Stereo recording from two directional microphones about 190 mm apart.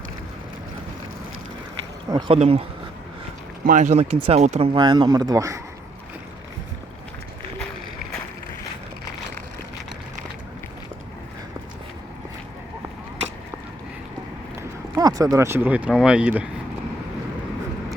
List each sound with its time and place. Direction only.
2.0 s speech: 25° right (ahead or behind)
3.7 s speech: 40° right (ahead or behind)
4.7 s speech: 25° right (ahead or behind)
14.9 s speech: 20° right (ahead or behind)